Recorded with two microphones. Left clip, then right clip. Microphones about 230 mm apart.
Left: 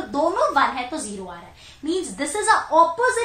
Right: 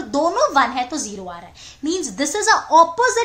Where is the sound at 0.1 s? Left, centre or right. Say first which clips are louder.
Right 3 dB; right.